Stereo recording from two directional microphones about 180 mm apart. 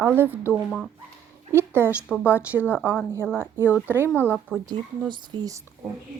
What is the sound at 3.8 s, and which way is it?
Speech, 10° right (ahead or behind).